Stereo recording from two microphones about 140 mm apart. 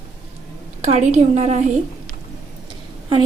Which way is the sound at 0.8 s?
55° right (ahead or behind).